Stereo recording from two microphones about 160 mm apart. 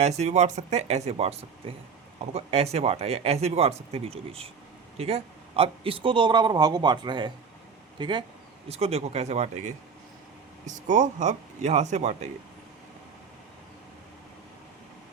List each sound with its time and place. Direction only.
0.0 s a man's voice: 45° right (ahead or behind); by 8.2 s 30° right (ahead or behind)
8.7 s speech: 40° right (ahead or behind)